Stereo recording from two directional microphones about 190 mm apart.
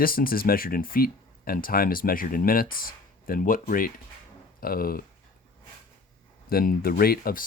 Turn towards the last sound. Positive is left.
turn(degrees=50)  # may be behind; listen again after turning